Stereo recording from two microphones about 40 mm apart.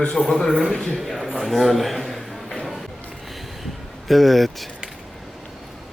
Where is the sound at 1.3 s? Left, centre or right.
Centre.